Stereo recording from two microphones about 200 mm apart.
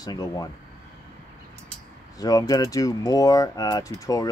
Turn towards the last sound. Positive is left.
turn(degrees=15)  # may be behind; listen again after turning